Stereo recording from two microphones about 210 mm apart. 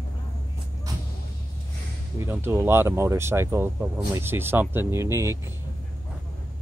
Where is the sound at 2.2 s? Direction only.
10° right (ahead or behind).